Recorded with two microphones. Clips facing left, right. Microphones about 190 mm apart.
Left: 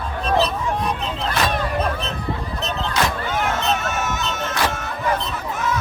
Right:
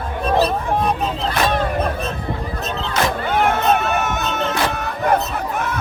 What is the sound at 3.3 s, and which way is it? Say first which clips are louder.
Music: right 5 dB; 60° right (ahead or behind).